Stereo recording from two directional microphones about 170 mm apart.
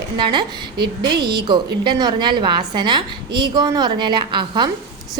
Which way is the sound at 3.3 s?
75° right (ahead or behind).